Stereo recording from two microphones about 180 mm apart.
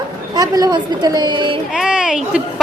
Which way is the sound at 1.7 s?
5° right (ahead or behind).